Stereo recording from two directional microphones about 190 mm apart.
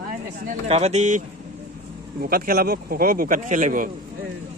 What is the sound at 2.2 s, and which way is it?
Speech, 50° right (ahead or behind).